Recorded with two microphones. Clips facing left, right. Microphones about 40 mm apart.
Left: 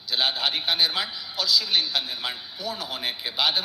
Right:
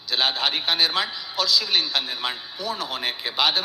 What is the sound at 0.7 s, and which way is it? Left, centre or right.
Speech, right.